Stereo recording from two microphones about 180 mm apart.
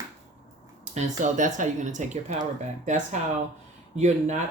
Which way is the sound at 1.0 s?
45° right (ahead or behind).